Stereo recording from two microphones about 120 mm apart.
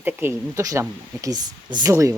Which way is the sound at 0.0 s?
20° right (ahead or behind).